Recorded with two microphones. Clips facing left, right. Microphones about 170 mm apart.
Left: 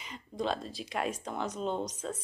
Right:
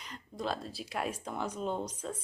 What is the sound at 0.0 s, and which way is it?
Speech, centre (ahead or behind).